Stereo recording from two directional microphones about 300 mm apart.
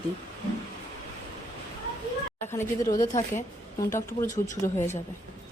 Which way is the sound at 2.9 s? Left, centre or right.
Left.